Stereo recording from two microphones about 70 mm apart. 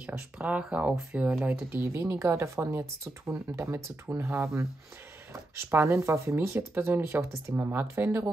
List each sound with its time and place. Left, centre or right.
0.4 s speech: centre
1.7 s speech: right